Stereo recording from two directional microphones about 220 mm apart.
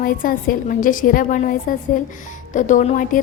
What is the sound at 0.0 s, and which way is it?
A woman's voice, 40° left (ahead or behind).